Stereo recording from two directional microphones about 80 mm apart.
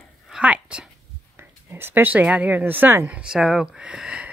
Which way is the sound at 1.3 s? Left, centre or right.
Right.